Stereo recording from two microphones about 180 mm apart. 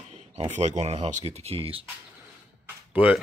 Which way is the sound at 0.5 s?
40° right (ahead or behind).